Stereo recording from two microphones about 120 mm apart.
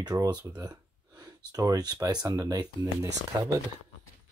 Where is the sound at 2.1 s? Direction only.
30° right (ahead or behind).